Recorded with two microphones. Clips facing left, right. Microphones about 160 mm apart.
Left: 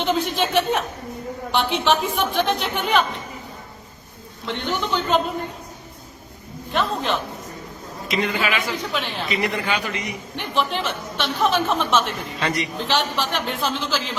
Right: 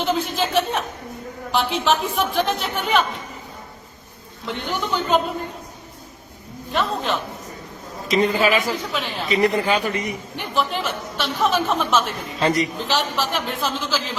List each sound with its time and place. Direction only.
0.0 s chuckle: centre (ahead or behind)
1.5 s a woman's voice: centre (ahead or behind)
4.4 s a woman's voice: 5° right (ahead or behind)
6.7 s a woman's voice: centre (ahead or behind)
8.0 s speech: 35° right (ahead or behind)
8.9 s a woman's voice: centre (ahead or behind)
9.3 s speech: 35° right (ahead or behind)
10.3 s a woman's voice: centre (ahead or behind)
12.4 s speech: 35° right (ahead or behind)
12.8 s a woman's voice: centre (ahead or behind)